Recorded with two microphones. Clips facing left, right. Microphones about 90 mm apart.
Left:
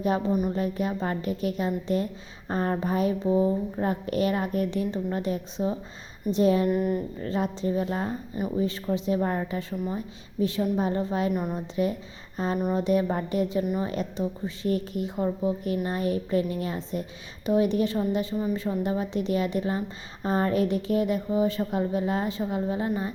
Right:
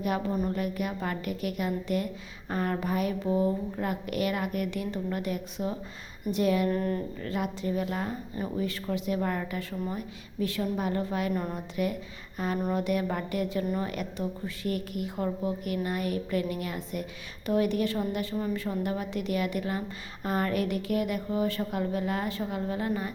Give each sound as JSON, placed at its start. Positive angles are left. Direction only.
{"t": 0.3, "sound": "speech", "side_deg": 10}
{"t": 0.5, "sound": "a woman's voice", "side_deg": 30}
{"t": 6.7, "sound": "speech", "side_deg": 10}
{"t": 7.2, "sound": "a woman's voice", "side_deg": 30}